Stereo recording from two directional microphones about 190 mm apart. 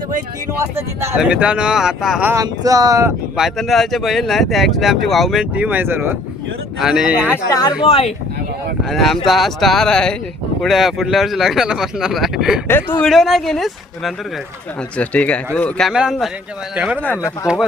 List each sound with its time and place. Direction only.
1.0 s speech: 5° right (ahead or behind)
2.3 s speech: 20° right (ahead or behind)
3.3 s speech: centre (ahead or behind)
7.3 s speech: 20° left (ahead or behind)
7.9 s speech: 35° left (ahead or behind)
8.8 s speech: centre (ahead or behind)
12.6 s speech: 10° left (ahead or behind)
13.1 s speech: centre (ahead or behind)
17.0 s speech: 10° left (ahead or behind)
17.4 s speech: 5° right (ahead or behind)